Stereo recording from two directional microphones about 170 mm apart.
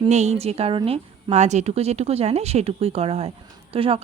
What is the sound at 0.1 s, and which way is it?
A woman's voice, 40° right (ahead or behind).